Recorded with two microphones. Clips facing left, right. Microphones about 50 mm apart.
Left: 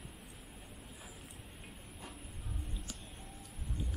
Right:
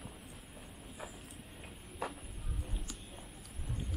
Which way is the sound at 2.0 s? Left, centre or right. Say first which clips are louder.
Right 11 dB; right.